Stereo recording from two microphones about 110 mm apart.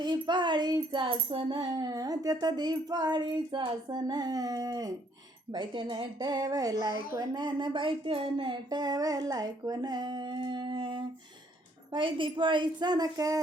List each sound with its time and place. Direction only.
0.0 s speech: 40° right (ahead or behind)
5.5 s speech: 45° right (ahead or behind)